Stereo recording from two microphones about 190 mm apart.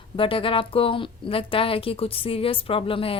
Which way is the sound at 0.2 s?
30° left (ahead or behind).